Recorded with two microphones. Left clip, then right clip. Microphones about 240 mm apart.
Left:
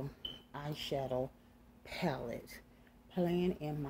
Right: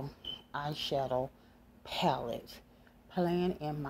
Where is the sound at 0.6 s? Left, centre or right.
Right.